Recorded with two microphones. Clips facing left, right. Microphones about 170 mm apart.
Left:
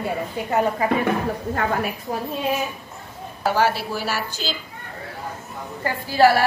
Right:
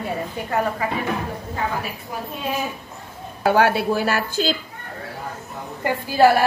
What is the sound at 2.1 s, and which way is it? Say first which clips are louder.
Speech: left 3 dB; 40° left (ahead or behind).